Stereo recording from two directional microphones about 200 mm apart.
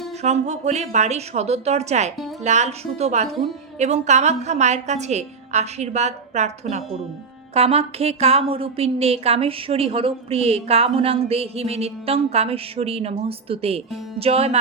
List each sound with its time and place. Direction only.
0.2 s a woman's voice: 35° right (ahead or behind)